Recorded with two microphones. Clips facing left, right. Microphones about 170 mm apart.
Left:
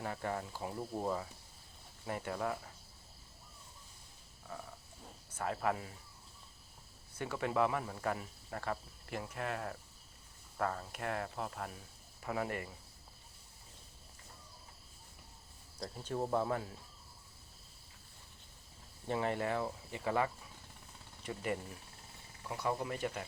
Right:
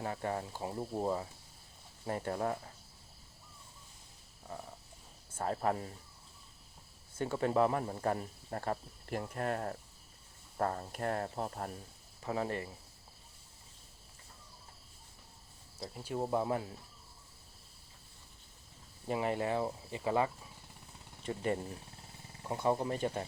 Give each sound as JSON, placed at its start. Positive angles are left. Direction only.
{"t": 0.0, "sound": "speech", "side_deg": -25}
{"t": 2.0, "sound": "speech", "side_deg": -35}
{"t": 5.4, "sound": "speech", "side_deg": -35}
{"t": 7.2, "sound": "speech", "side_deg": -30}
{"t": 15.8, "sound": "speech", "side_deg": -10}
{"t": 19.0, "sound": "speech", "side_deg": -20}